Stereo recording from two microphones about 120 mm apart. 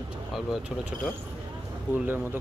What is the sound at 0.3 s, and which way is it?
Speech, 5° right (ahead or behind).